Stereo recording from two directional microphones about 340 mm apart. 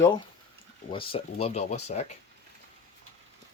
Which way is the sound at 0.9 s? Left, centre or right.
Centre.